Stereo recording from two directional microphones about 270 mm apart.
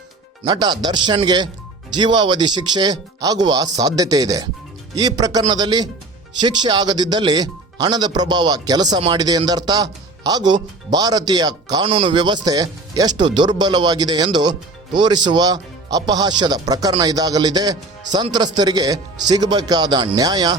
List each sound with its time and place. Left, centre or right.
0.4 s speech: centre